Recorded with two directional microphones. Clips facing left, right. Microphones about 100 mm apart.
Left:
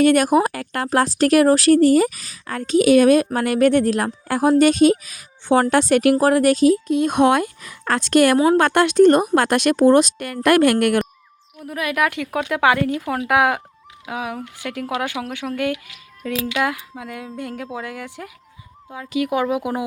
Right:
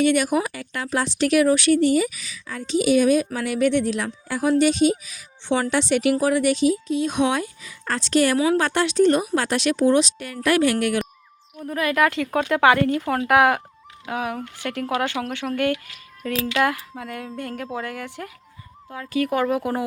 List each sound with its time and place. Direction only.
0.0 s speech: 45° left (ahead or behind)
11.5 s speech: 5° left (ahead or behind)